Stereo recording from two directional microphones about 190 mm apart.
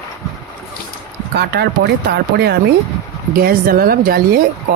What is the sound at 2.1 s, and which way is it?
Speech, 60° right (ahead or behind).